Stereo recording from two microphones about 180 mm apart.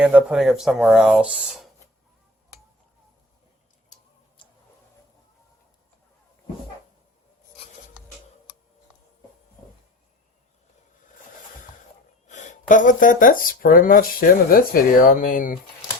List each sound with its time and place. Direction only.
0.0 s speech: 10° right (ahead or behind)
3.9 s tick-tock: 40° left (ahead or behind)
4.4 s a sound: 25° left (ahead or behind)
12.3 s speech: 45° left (ahead or behind)